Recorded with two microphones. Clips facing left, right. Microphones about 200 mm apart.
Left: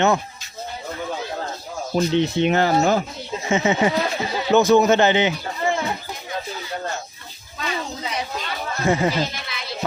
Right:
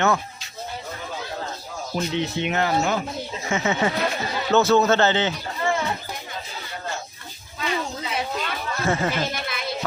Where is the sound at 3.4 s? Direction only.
20° left (ahead or behind).